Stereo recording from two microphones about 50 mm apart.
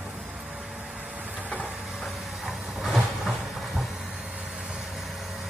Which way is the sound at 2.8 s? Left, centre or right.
Centre.